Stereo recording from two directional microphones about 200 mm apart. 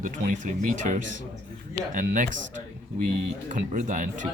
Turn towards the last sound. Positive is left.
turn(degrees=-40)  # may be behind; listen again after turning